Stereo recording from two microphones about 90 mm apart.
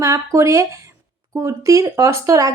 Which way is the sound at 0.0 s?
40° right (ahead or behind).